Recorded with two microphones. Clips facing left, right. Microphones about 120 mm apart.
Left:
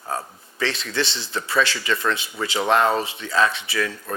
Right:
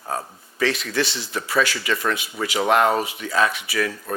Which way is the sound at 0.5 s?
30° left (ahead or behind).